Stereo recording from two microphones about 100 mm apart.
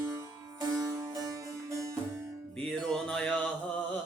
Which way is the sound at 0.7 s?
35° right (ahead or behind).